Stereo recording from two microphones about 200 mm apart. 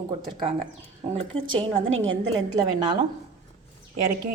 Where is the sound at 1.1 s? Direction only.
30° right (ahead or behind).